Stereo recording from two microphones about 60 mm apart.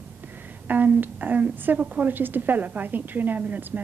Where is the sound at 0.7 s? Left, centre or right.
Right.